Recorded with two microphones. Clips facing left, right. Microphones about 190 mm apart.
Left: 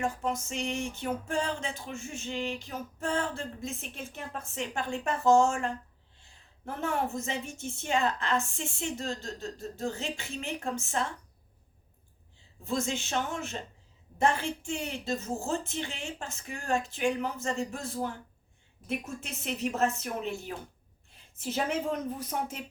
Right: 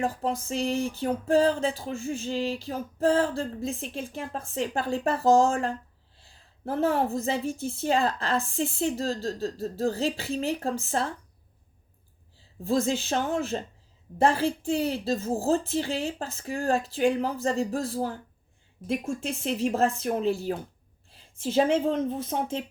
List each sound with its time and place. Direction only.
0.0 s a woman's voice: 35° right (ahead or behind)
12.4 s a woman's voice: 35° right (ahead or behind)